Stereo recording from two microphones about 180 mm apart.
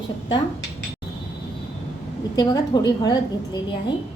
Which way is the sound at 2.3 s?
25° left (ahead or behind).